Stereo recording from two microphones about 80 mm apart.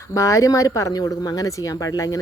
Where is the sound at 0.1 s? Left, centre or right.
Left.